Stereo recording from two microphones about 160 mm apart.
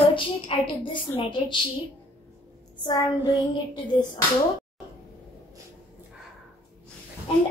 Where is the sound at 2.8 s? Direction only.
25° left (ahead or behind).